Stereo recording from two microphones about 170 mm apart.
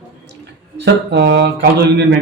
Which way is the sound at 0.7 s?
85° right.